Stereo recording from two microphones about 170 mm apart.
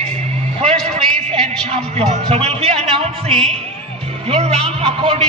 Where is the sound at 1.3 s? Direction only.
40° right (ahead or behind).